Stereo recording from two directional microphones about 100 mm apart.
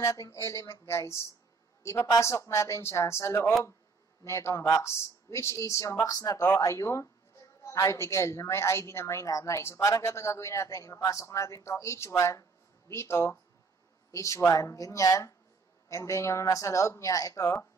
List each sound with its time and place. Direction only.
0.0 s a woman's voice: 30° left (ahead or behind)